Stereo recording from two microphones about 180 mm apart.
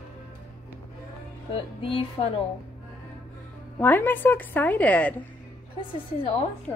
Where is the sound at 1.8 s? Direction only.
30° left (ahead or behind).